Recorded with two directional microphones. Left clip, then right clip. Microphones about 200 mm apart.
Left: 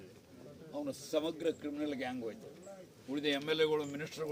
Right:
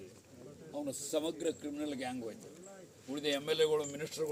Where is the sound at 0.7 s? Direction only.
10° right (ahead or behind).